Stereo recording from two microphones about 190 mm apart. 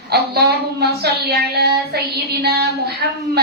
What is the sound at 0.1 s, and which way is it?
A woman's voice, 55° right (ahead or behind).